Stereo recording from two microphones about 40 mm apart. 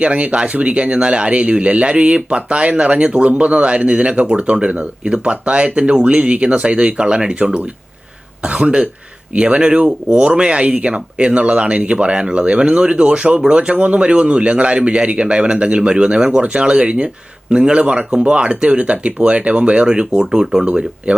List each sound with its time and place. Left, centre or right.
0.0 s speech: right
4.7 s speech: right
5.1 s speech: right
20.7 s speech: right